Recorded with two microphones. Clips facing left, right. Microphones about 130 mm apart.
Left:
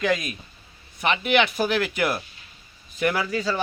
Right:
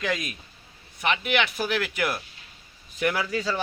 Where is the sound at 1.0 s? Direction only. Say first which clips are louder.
Left 4 dB; 5° right (ahead or behind).